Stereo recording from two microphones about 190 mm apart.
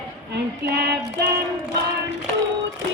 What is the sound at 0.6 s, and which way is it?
Female singing, 60° right (ahead or behind).